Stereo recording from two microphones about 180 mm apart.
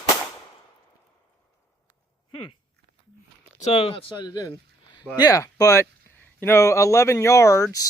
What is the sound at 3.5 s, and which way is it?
Speech, 35° left (ahead or behind).